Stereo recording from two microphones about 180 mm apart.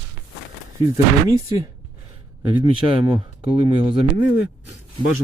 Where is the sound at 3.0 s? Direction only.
15° right (ahead or behind).